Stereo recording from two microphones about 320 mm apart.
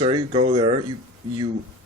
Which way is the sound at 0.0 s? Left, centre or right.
Centre.